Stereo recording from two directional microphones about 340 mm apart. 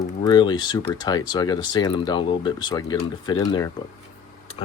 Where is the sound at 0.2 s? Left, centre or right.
Centre.